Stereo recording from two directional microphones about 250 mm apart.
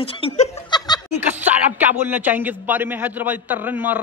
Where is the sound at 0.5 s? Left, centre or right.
Centre.